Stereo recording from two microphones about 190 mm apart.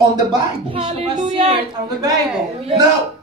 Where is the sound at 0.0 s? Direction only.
20° right (ahead or behind).